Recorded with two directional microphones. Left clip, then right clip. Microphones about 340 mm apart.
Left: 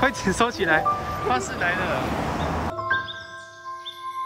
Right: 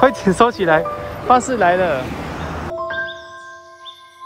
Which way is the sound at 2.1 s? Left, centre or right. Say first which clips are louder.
Left 1 dB; left.